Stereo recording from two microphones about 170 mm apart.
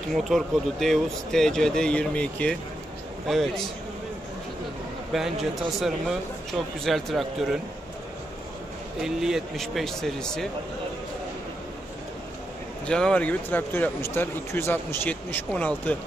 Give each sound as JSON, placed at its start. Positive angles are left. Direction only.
{"t": 0.1, "sound": "speech", "side_deg": 0}
{"t": 5.1, "sound": "speech", "side_deg": 0}
{"t": 9.0, "sound": "speech", "side_deg": 0}
{"t": 12.8, "sound": "speech", "side_deg": 5}